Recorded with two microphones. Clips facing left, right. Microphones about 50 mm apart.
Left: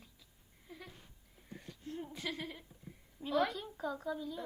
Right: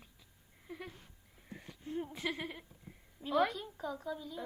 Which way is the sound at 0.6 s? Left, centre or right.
Centre.